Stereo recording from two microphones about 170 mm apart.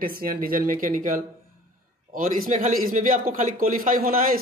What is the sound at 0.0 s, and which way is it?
A man's voice, 60° right (ahead or behind).